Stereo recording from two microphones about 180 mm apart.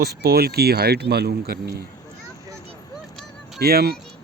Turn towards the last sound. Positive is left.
turn(degrees=-60)  # may be behind; listen again after turning